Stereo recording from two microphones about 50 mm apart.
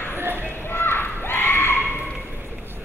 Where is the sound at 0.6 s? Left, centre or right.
Left.